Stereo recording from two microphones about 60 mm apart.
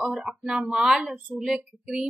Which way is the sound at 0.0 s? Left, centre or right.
Centre.